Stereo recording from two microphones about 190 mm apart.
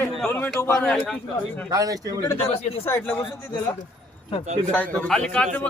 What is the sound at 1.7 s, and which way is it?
Speech, 20° right (ahead or behind).